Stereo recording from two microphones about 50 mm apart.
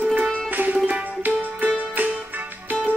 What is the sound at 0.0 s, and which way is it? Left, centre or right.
Music, right.